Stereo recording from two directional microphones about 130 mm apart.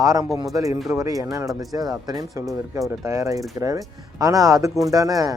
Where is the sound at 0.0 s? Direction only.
25° right (ahead or behind).